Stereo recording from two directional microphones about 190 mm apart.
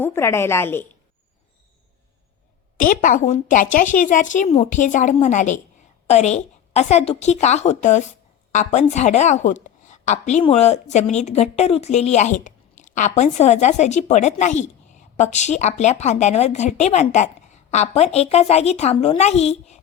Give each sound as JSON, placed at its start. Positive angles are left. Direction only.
{"t": 0.0, "sound": "a woman's voice", "side_deg": 15}
{"t": 2.7, "sound": "a woman's voice", "side_deg": 45}